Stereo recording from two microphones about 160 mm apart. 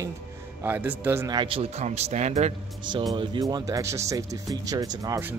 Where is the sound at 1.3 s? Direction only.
30° right (ahead or behind).